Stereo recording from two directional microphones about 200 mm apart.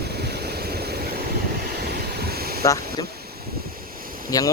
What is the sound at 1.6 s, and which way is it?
Waves, 50° right (ahead or behind).